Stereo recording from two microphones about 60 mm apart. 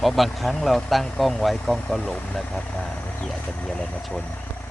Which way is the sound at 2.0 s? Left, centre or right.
Centre.